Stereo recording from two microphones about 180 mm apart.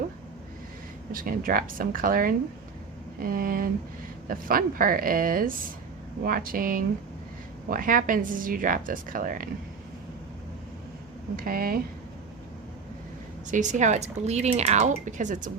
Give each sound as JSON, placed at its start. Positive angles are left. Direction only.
{"t": 1.1, "sound": "speech", "side_deg": -55}
{"t": 11.3, "sound": "speech", "side_deg": -50}
{"t": 13.5, "sound": "speech", "side_deg": -45}